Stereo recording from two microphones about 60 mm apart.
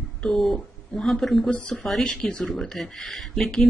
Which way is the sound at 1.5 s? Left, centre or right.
Left.